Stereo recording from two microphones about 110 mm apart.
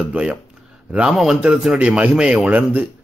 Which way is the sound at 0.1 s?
10° right (ahead or behind).